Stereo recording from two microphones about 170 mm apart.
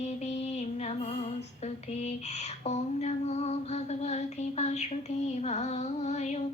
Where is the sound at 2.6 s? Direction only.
40° left (ahead or behind).